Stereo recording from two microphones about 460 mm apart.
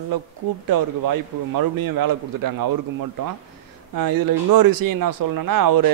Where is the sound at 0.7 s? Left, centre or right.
Right.